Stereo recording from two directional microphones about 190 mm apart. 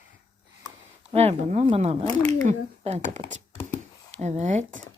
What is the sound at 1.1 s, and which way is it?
Speech, 35° right (ahead or behind).